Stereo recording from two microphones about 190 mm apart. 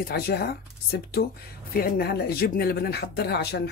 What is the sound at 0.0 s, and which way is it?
Speech, 55° left (ahead or behind).